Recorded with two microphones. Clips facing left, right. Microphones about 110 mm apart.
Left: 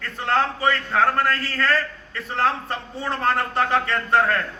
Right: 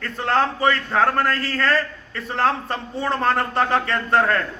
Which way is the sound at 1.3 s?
30° right (ahead or behind).